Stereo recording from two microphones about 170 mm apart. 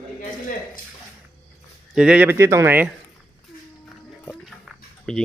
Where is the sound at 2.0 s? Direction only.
5° right (ahead or behind).